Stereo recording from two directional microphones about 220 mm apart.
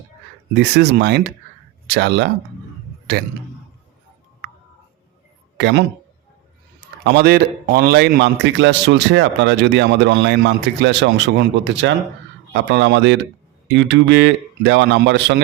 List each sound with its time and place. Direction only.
0.5 s a man's voice: 50° right (ahead or behind)
5.5 s speech: 50° right (ahead or behind)
7.0 s a man's voice: 45° right (ahead or behind)